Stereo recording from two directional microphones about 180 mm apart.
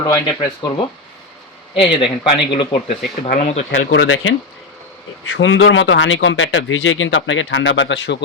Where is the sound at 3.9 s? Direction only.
90° left.